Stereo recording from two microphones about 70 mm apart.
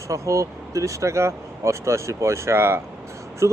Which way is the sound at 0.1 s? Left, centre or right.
Right.